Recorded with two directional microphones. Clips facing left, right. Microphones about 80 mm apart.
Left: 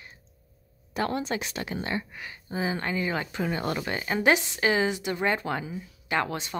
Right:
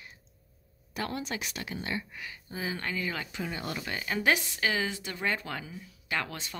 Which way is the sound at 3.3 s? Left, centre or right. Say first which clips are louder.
Left 7 dB; left.